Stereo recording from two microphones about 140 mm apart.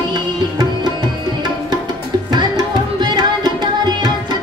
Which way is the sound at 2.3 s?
30° right (ahead or behind).